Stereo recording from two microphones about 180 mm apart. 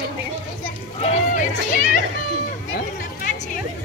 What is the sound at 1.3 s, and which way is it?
Music, 50° left (ahead or behind).